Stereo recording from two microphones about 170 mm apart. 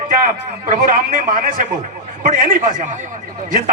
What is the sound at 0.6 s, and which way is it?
A man's voice, 55° right (ahead or behind).